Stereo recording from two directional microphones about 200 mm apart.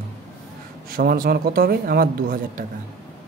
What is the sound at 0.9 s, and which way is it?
Speech, 45° right (ahead or behind).